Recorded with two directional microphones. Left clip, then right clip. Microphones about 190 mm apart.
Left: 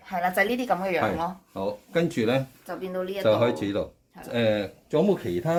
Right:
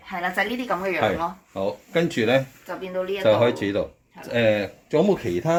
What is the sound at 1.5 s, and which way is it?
Speech, 5° right (ahead or behind).